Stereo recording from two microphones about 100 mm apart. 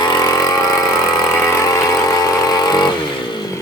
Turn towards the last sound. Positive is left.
turn(degrees=40)  # may be behind; listen again after turning